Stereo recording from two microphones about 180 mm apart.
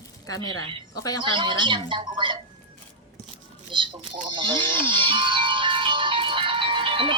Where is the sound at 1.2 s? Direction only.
25° right (ahead or behind).